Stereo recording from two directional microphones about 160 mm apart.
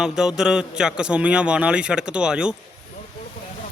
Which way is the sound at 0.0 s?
5° right (ahead or behind).